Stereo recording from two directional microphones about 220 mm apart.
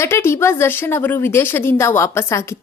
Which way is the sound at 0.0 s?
10° left (ahead or behind).